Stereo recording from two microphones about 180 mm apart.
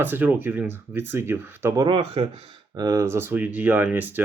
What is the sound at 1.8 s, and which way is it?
Speech, 30° right (ahead or behind).